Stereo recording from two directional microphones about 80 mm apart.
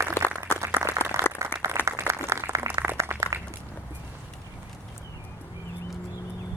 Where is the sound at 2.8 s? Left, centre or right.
Right.